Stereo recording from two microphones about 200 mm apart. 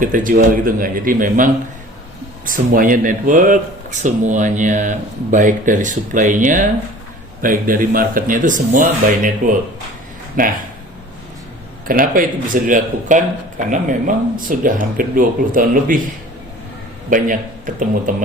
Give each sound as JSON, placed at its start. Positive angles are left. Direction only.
{"t": 0.0, "sound": "speech", "side_deg": -40}
{"t": 2.5, "sound": "speech", "side_deg": -45}
{"t": 11.9, "sound": "speech", "side_deg": -45}
{"t": 17.1, "sound": "speech", "side_deg": -40}